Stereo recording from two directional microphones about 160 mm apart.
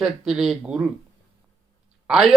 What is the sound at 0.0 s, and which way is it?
Speech, 5° right (ahead or behind).